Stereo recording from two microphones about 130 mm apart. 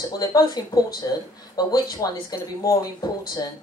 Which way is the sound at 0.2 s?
25° left (ahead or behind).